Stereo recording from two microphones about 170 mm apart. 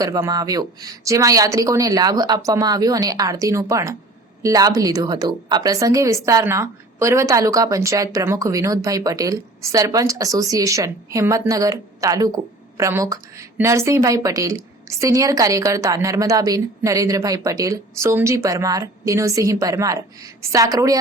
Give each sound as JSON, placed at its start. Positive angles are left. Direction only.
{"t": 0.0, "sound": "a woman's voice", "side_deg": -20}